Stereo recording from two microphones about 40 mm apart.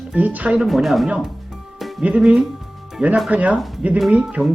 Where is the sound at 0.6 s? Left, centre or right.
Centre.